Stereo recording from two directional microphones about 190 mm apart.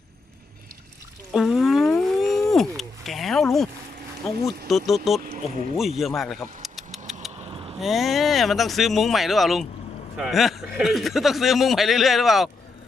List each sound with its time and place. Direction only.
1.3 s a sound: centre (ahead or behind)
4.4 s a man's voice: centre (ahead or behind)
7.4 s vehicle: 30° right (ahead or behind)
7.8 s a man's voice: centre (ahead or behind)